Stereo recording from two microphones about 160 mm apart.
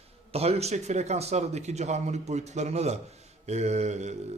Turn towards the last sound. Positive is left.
turn(degrees=-45)  # may be behind; listen again after turning